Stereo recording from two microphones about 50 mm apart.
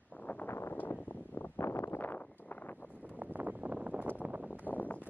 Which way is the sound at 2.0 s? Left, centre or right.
Left.